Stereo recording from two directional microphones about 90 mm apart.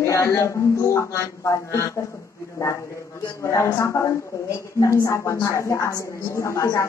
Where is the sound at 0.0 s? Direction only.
35° left (ahead or behind).